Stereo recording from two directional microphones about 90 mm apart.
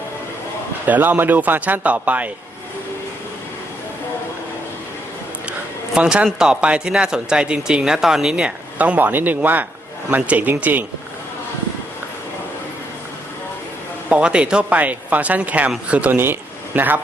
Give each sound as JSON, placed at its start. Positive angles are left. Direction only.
{"t": 0.9, "sound": "speech", "side_deg": -20}
{"t": 5.5, "sound": "a sound", "side_deg": -10}
{"t": 6.4, "sound": "speech", "side_deg": -10}
{"t": 14.1, "sound": "a man's voice", "side_deg": -15}